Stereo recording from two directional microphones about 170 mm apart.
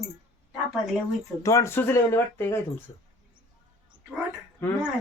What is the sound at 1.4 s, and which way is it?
Speech, 20° left (ahead or behind).